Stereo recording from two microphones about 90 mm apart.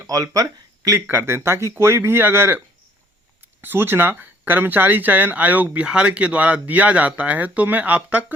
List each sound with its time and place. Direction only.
0.0 s speech: 40° right (ahead or behind)
1.0 s speech: 25° right (ahead or behind)
3.6 s speech: 25° right (ahead or behind)